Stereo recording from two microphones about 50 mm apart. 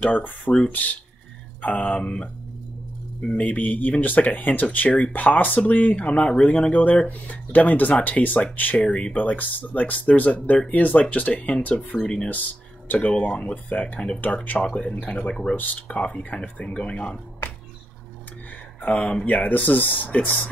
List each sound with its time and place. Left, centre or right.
0.0 s speech: left
3.3 s speech: left
6.4 s speech: centre
6.7 s speech: left
8.8 s speech: left
9.1 s speech: left
13.0 s speech: left
13.7 s speech: left
13.9 s speech: centre
14.2 s speech: left
14.6 s speech: left
18.9 s speech: left